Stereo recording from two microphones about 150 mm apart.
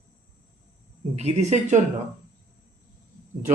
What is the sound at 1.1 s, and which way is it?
Speech, 50° right (ahead or behind).